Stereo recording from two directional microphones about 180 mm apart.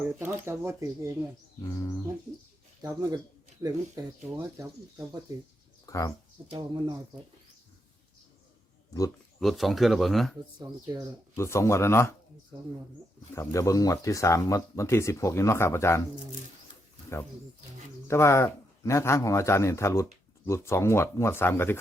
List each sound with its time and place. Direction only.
0.0 s speech: 10° right (ahead or behind)
1.6 s speech: 20° left (ahead or behind)
2.8 s speech: 20° right (ahead or behind)
5.8 s speech: 20° left (ahead or behind)
6.6 s speech: 25° right (ahead or behind)
9.4 s speech: centre (ahead or behind)
10.6 s speech: 20° right (ahead or behind)
11.3 s speech: 15° left (ahead or behind)
13.3 s speech: 15° left (ahead or behind)
18.1 s speech: 15° left (ahead or behind)